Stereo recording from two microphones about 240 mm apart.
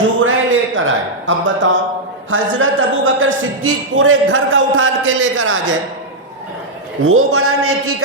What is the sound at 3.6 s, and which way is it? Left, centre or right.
A man's voice, right.